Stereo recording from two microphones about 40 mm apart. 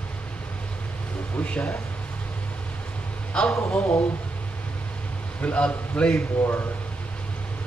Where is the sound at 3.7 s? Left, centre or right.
Left.